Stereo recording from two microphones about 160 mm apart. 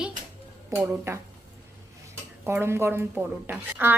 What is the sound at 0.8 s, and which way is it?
Speech, 15° right (ahead or behind).